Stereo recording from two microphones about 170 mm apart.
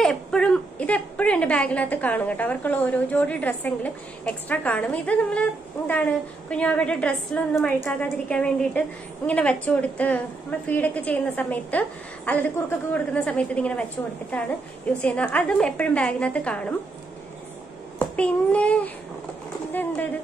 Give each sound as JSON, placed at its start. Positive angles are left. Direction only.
{"t": 0.0, "sound": "a woman's voice", "side_deg": 5}
{"t": 14.9, "sound": "a woman's voice", "side_deg": 10}
{"t": 17.9, "sound": "a child's voice", "side_deg": 5}